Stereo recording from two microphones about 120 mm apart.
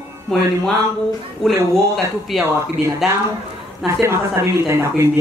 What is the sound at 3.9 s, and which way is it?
A woman's voice, 20° right (ahead or behind).